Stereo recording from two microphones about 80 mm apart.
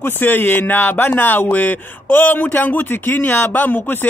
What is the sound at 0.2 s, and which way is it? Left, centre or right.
Speech, left.